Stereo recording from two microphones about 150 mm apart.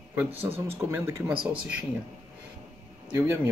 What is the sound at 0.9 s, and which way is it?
Speech, 15° right (ahead or behind).